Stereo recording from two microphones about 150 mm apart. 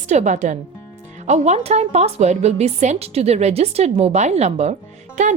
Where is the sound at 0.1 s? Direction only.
50° right (ahead or behind).